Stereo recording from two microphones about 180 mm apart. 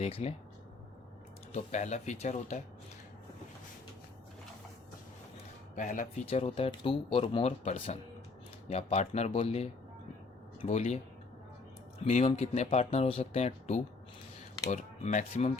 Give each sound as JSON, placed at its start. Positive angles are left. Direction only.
{"t": 0.0, "sound": "speech", "side_deg": 35}
{"t": 1.5, "sound": "speech", "side_deg": 40}
{"t": 5.7, "sound": "speech", "side_deg": 45}
{"t": 6.2, "sound": "speech", "side_deg": 30}